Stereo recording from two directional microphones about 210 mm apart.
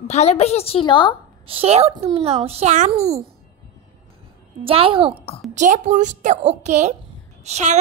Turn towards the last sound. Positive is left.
turn(degrees=-35)  # may be behind; listen again after turning